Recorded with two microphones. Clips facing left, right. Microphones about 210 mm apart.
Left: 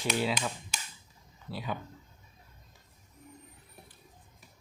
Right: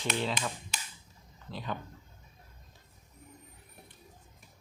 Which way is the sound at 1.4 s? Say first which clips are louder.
Left 1 dB; 10° left (ahead or behind).